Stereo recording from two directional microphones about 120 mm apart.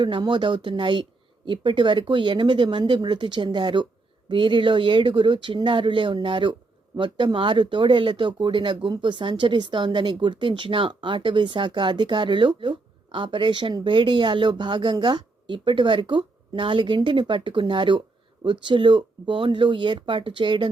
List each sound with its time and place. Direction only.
0.0 s speech: 40° right (ahead or behind)